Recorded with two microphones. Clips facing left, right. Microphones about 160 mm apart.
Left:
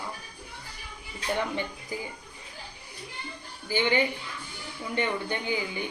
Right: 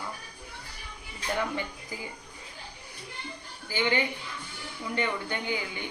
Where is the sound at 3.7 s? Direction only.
20° left (ahead or behind).